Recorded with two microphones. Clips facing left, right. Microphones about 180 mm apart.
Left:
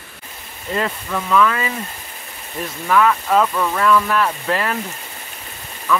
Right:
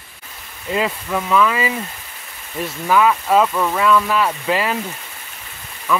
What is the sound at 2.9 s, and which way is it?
Speech, 10° right (ahead or behind).